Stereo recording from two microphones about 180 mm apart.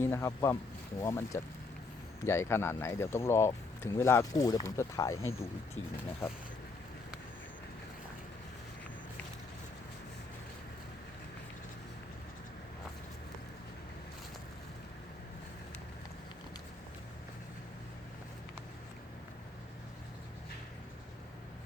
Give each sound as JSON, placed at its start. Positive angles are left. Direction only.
{"t": 0.0, "sound": "speech", "side_deg": 15}